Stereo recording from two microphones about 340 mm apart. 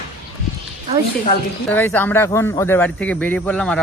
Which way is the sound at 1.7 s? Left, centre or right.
Centre.